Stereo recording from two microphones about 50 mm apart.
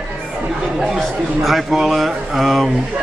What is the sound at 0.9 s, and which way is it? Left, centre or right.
A man's voice, centre.